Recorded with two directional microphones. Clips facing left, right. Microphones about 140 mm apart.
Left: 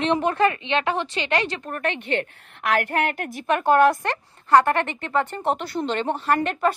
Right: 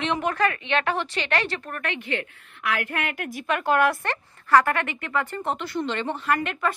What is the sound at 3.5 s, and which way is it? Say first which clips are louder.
A woman's voice: left 5 dB; 20° left (ahead or behind).